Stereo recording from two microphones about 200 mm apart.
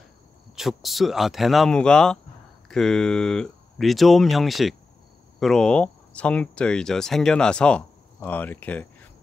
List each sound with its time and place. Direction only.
0.6 s speech: centre (ahead or behind)